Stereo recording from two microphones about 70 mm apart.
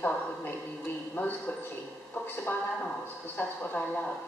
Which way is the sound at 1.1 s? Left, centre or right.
Left.